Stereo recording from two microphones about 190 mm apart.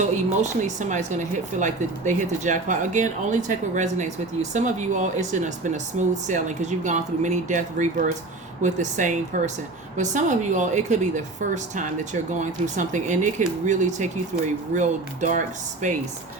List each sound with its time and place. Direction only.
0.0 s speech: 40° right (ahead or behind)